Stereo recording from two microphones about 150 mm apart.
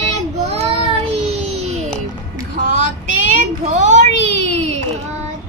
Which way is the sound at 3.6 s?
50° right (ahead or behind).